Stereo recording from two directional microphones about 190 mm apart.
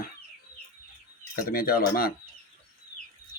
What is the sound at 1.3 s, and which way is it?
Speech, 50° left (ahead or behind).